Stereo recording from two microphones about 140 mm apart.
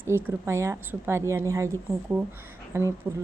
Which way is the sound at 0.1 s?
15° right (ahead or behind).